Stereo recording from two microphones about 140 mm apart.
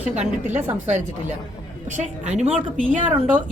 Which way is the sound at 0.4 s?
15° right (ahead or behind).